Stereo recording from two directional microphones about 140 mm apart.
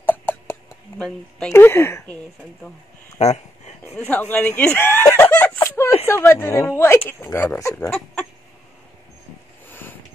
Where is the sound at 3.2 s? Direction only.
50° left (ahead or behind).